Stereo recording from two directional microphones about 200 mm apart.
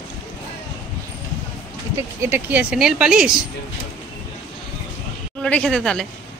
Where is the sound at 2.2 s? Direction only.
10° right (ahead or behind).